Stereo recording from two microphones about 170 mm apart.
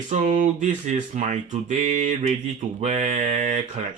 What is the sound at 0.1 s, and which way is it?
Speech, 45° right (ahead or behind).